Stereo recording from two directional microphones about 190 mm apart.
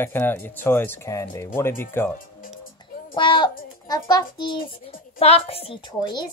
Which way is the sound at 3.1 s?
25° left (ahead or behind).